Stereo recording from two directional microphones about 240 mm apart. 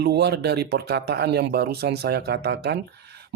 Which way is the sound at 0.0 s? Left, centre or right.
Right.